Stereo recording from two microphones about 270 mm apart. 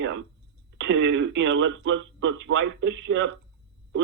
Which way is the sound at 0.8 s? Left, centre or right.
Right.